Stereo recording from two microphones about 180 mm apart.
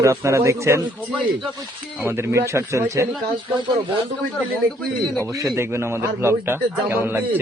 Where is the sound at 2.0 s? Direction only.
15° right (ahead or behind).